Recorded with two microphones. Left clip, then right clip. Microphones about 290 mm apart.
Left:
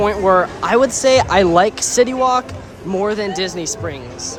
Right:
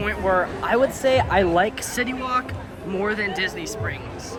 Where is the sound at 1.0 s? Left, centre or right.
Left.